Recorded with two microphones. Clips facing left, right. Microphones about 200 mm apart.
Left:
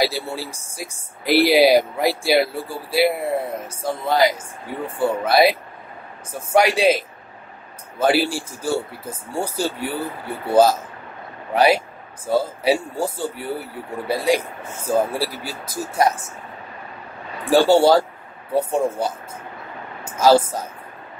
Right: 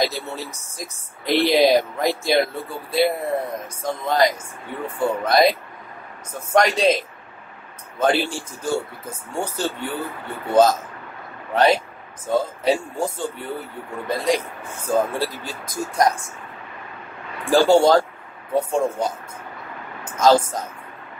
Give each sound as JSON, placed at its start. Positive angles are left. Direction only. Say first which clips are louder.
{"t": 0.0, "sound": "speech", "louder": "left 2 dB", "side_deg": 10}
{"t": 5.2, "sound": "speech", "louder": "left 1 dB", "side_deg": 5}
{"t": 6.5, "sound": "speech", "louder": "left 1 dB", "side_deg": 10}
{"t": 8.0, "sound": "speech", "louder": "left 2 dB", "side_deg": 10}
{"t": 17.5, "sound": "speech", "louder": "left 1 dB", "side_deg": 5}
{"t": 20.1, "sound": "a woman's voice", "louder": "left 1 dB", "side_deg": 10}